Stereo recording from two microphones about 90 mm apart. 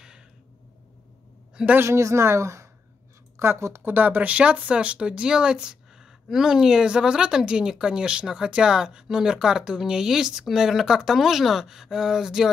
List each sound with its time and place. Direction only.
1.8 s a woman's voice: 35° right (ahead or behind); by 12.4 s 5° right (ahead or behind)